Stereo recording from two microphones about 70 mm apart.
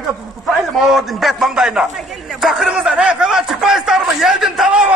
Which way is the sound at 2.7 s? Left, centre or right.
Centre.